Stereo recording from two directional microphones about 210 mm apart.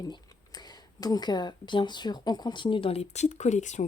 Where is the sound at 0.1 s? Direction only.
20° left (ahead or behind).